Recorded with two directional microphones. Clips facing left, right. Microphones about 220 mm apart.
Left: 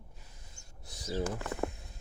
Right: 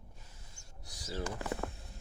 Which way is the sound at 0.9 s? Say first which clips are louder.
Left 5 dB; 20° left (ahead or behind).